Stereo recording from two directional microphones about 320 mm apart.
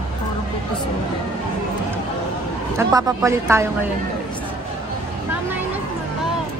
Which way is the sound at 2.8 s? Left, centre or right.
Centre.